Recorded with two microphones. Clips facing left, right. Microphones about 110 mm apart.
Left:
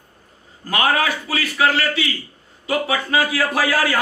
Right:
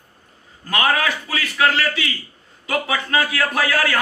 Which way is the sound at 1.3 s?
30° left (ahead or behind).